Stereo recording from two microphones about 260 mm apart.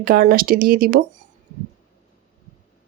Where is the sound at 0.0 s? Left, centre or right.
Right.